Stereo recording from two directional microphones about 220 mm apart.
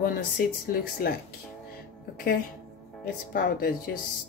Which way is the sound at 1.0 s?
40° left (ahead or behind).